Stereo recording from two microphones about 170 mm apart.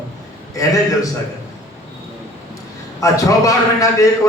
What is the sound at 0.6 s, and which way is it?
Speech, 20° left (ahead or behind).